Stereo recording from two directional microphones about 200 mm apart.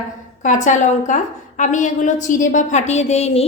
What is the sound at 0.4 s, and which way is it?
A woman's voice, 40° left (ahead or behind).